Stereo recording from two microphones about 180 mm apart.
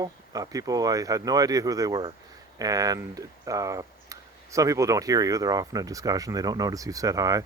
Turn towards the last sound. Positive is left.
turn(degrees=-20)  # may be behind; listen again after turning